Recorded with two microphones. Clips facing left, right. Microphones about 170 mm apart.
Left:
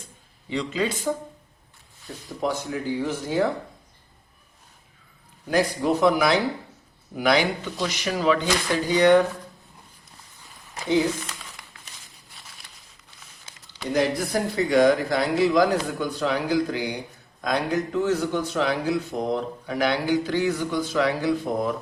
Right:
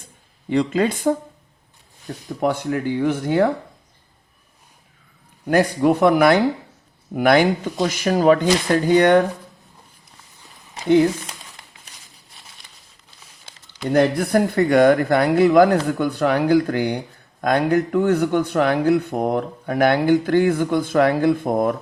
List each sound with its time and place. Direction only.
0.5 s speech: 55° right (ahead or behind)
2.4 s speech: 60° right (ahead or behind)
5.5 s speech: 55° right (ahead or behind)
13.9 s speech: 60° right (ahead or behind)